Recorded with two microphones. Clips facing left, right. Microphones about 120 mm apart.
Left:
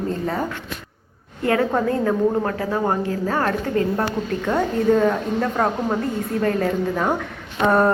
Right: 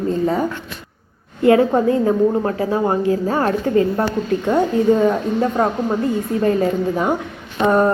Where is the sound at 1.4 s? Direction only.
20° right (ahead or behind).